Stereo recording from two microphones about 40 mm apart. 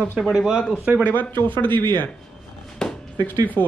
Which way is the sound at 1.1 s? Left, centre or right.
Left.